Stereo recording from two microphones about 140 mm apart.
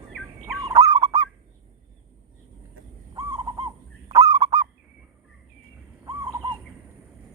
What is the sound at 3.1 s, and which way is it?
Owl, 35° right (ahead or behind).